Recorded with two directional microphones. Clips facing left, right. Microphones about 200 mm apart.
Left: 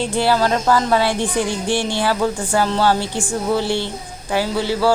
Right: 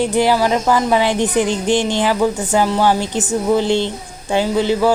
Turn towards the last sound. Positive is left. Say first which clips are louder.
# right 3 dB
turn(degrees=-20)  # may be behind; listen again after turning